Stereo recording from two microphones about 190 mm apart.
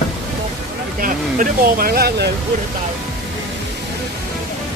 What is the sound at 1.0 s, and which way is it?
Speech, 50° right (ahead or behind).